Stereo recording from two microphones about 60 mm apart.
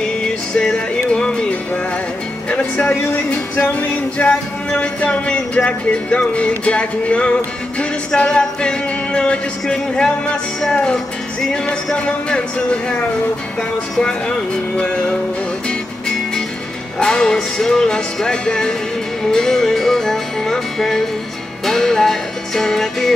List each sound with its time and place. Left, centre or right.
0.6 s music: centre
3.5 s a sound: left
8.2 s music: centre
17.0 s music: centre